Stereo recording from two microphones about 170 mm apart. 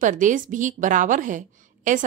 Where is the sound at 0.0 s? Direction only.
50° right (ahead or behind).